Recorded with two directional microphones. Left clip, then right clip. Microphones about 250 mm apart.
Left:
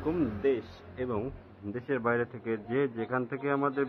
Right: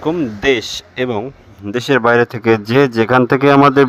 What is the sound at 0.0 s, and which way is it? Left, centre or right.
Speech, right.